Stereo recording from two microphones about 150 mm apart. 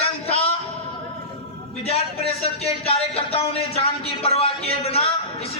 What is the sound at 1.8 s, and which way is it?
A man's voice, 45° left (ahead or behind).